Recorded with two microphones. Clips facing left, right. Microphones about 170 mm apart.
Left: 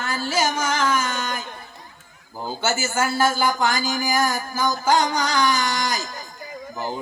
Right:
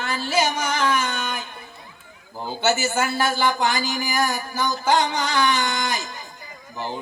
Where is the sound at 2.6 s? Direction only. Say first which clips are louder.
Right 2 dB; 45° left (ahead or behind).